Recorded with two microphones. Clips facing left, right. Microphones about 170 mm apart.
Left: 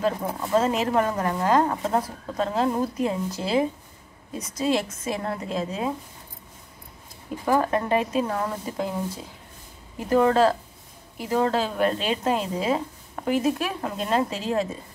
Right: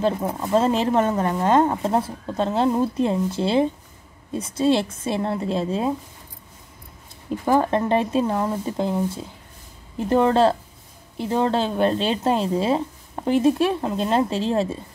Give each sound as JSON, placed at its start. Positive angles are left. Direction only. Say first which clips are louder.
{"t": 0.0, "sound": "speech", "louder": "right 3 dB", "side_deg": -20}
{"t": 7.4, "sound": "speech", "louder": "right 3 dB", "side_deg": -25}